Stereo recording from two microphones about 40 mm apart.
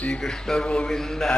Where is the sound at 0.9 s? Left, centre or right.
Centre.